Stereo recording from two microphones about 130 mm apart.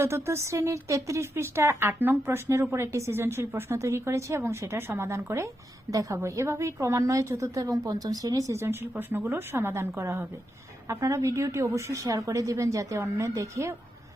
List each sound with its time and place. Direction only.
0.3 s speech: 20° right (ahead or behind)